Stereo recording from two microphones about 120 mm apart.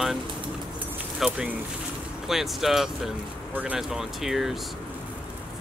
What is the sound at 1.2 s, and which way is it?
Speech, 10° right (ahead or behind).